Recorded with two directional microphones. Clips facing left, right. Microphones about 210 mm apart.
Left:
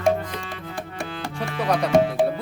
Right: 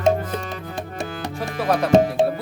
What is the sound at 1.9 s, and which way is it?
Speech, 20° right (ahead or behind).